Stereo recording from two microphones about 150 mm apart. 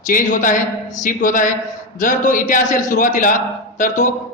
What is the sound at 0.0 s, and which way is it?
A man's voice, 65° left (ahead or behind).